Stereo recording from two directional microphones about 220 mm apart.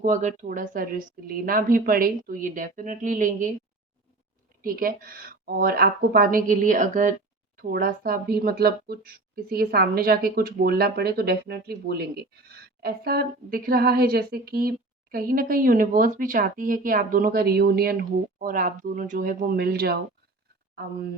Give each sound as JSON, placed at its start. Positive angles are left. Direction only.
{"t": 0.0, "sound": "speech", "side_deg": -35}
{"t": 4.6, "sound": "a woman's voice", "side_deg": -40}